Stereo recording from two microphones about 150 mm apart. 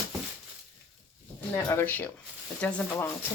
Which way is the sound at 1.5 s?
15° left (ahead or behind).